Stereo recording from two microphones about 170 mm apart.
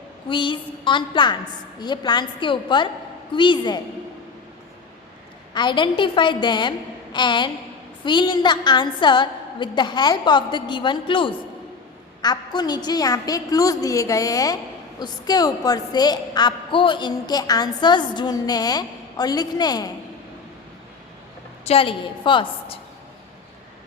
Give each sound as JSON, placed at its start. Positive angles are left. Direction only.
{"t": 0.3, "sound": "a woman's voice", "side_deg": 30}
{"t": 5.5, "sound": "a woman's voice", "side_deg": 25}
{"t": 21.6, "sound": "a woman's voice", "side_deg": 35}